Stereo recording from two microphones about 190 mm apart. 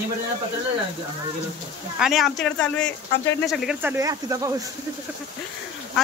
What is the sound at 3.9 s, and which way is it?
Speech, 15° right (ahead or behind).